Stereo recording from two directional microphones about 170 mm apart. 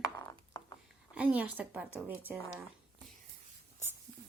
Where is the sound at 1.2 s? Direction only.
10° right (ahead or behind).